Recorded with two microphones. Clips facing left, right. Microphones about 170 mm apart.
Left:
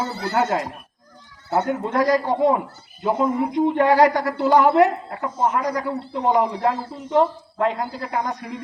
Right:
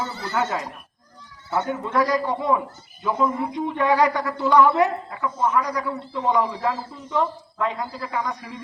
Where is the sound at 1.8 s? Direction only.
40° left (ahead or behind).